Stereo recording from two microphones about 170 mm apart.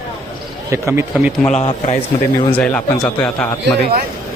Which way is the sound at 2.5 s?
10° left (ahead or behind).